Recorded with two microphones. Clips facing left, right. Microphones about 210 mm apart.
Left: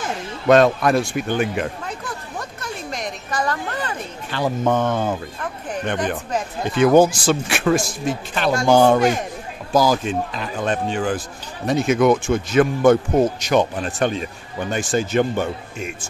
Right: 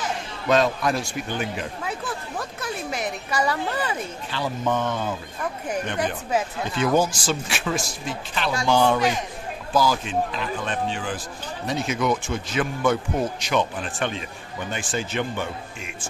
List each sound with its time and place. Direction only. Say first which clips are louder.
0.0 s speech: left 5 dB; 55° left (ahead or behind)
2.6 s a woman's voice: right 1 dB; 5° right (ahead or behind)
4.3 s speech: left 6 dB; 50° left (ahead or behind)
6.7 s speech: left 8 dB; 60° left (ahead or behind); by 16.1 s 45° left (ahead or behind)